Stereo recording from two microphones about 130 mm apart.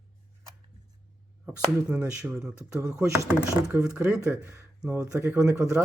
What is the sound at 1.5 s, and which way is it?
Speech, 10° right (ahead or behind).